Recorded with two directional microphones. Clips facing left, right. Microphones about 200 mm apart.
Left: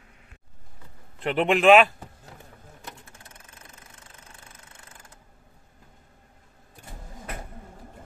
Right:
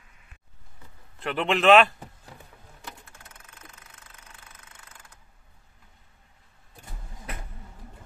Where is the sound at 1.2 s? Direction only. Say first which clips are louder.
Left 3 dB; 15° left (ahead or behind).